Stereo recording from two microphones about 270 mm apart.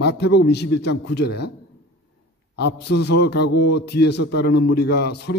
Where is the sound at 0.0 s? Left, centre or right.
Left.